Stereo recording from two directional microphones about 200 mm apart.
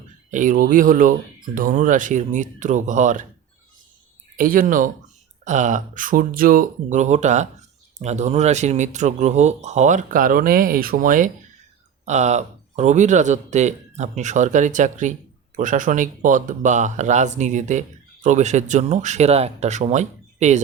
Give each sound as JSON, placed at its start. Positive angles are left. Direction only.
{"t": 0.3, "sound": "speech", "side_deg": -40}
{"t": 4.4, "sound": "speech", "side_deg": -45}